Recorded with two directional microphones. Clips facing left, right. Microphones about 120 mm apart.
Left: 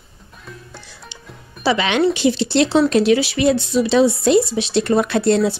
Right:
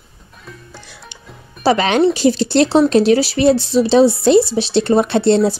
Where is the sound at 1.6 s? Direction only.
40° right (ahead or behind).